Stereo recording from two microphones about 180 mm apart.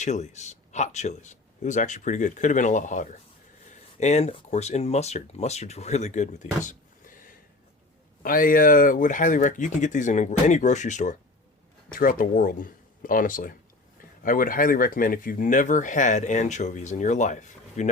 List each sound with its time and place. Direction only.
0.0 s speech: 40° left (ahead or behind)